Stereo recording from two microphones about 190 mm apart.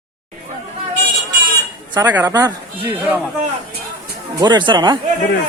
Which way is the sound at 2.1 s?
15° right (ahead or behind).